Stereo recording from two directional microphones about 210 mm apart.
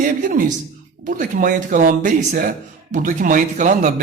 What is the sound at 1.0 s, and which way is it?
A man's voice, 40° right (ahead or behind).